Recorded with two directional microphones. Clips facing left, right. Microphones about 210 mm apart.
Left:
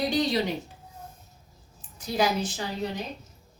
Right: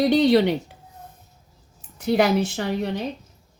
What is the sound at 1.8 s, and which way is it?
A woman's voice, 65° right (ahead or behind).